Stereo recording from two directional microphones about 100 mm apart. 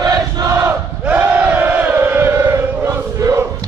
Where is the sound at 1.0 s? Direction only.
15° right (ahead or behind).